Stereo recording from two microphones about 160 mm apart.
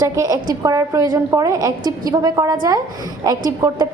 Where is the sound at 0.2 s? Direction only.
20° right (ahead or behind).